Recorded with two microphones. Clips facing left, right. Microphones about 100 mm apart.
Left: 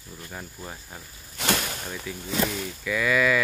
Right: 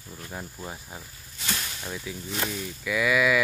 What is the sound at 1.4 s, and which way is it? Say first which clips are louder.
Snake: left 8 dB; 65° left (ahead or behind).